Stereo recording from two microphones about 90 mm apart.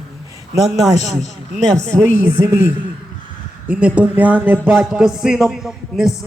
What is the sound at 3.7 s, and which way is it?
Speech, 15° right (ahead or behind).